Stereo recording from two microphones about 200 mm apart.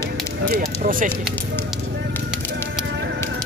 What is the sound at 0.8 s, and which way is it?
Speech, 45° right (ahead or behind).